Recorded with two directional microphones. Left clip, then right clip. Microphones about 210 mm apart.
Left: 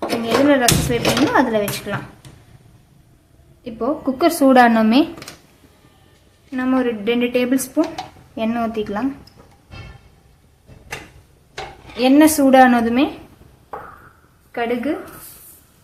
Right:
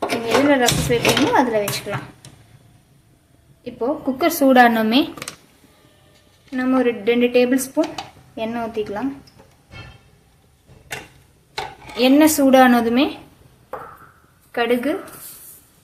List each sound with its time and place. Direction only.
0.4 s speech: 15° left (ahead or behind)
3.6 s speech: 15° left (ahead or behind)
6.5 s speech: 5° left (ahead or behind)
11.9 s a woman's voice: 5° left (ahead or behind)
14.5 s a woman's voice: 5° right (ahead or behind)